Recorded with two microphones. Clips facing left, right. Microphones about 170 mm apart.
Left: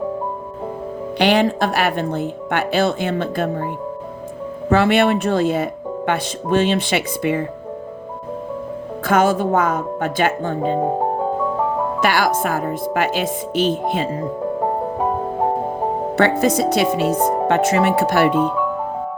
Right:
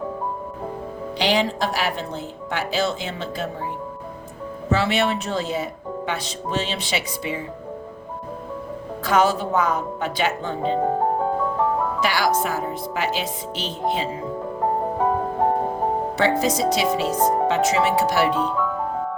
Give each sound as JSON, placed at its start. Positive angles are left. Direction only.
{"t": 1.2, "sound": "speech", "side_deg": 60}
{"t": 4.7, "sound": "speech", "side_deg": 55}
{"t": 9.0, "sound": "speech", "side_deg": 50}
{"t": 12.0, "sound": "speech", "side_deg": 55}
{"t": 16.1, "sound": "speech", "side_deg": 55}